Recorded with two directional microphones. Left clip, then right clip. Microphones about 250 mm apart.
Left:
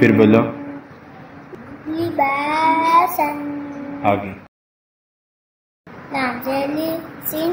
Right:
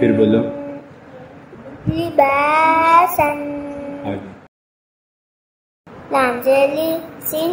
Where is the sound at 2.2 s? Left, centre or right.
Right.